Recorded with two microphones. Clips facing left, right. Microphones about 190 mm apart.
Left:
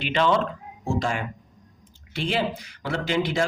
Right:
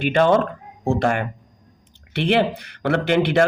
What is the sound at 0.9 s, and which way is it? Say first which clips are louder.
Speech: right 6 dB; 60° right (ahead or behind).